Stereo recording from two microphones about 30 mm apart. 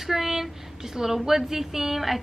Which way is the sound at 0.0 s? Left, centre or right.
Centre.